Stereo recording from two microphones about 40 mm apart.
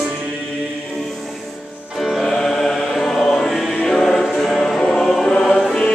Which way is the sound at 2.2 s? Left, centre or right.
Centre.